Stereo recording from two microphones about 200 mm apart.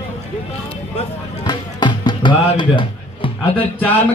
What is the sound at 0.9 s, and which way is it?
Music, 25° left (ahead or behind).